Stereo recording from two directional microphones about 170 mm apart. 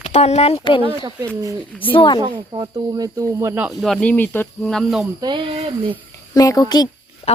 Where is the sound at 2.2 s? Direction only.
25° right (ahead or behind).